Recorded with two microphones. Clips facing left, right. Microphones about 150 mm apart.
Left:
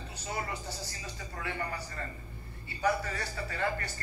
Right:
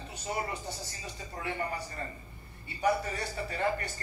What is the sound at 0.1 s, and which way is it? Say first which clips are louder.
Speech: right 2 dB; 20° right (ahead or behind).